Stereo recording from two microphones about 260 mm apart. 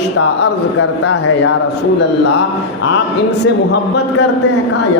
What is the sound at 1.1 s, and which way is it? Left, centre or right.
Speech, left.